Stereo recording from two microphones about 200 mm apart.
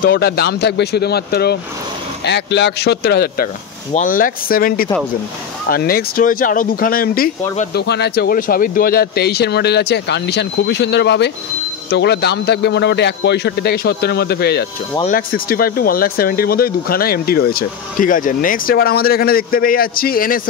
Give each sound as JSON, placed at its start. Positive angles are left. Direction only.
{"t": 0.0, "sound": "speech", "side_deg": 50}